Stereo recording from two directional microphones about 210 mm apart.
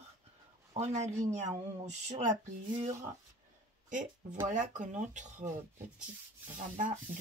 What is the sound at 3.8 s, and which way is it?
Speech, 40° right (ahead or behind).